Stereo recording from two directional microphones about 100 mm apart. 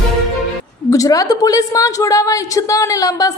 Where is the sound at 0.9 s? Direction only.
35° left (ahead or behind).